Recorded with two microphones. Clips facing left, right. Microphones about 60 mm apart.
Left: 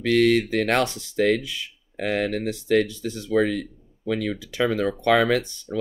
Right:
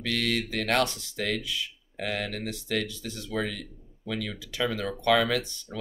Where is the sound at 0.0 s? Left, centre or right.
Left.